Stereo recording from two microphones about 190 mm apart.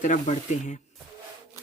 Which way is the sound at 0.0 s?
40° left (ahead or behind).